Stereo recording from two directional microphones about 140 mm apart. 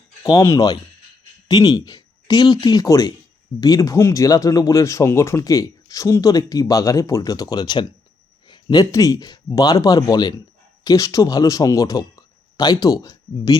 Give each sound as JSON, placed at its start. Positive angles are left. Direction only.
{"t": 0.2, "sound": "speech", "side_deg": 25}